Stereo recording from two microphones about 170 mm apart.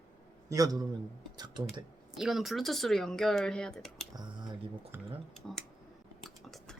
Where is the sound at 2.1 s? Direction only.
Centre (ahead or behind).